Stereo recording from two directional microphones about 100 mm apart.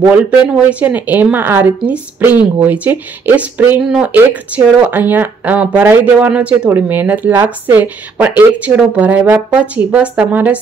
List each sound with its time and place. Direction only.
0.7 s speech: 15° right (ahead or behind)